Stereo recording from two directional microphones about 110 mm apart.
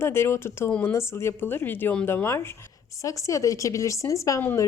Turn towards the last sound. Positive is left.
turn(degrees=30)  # may be behind; listen again after turning